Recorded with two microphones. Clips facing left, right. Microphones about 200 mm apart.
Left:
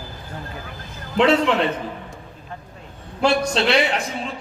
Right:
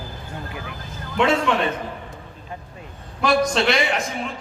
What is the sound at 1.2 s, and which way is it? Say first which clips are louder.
Speech: left 3 dB; 30° left (ahead or behind).